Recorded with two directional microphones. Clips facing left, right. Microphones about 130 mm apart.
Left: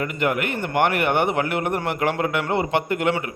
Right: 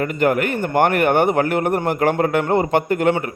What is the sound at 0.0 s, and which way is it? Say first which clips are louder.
A man's voice: right 5 dB; 40° right (ahead or behind).